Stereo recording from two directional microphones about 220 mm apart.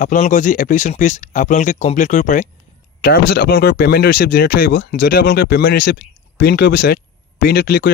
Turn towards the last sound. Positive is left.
turn(degrees=45)  # may be behind; listen again after turning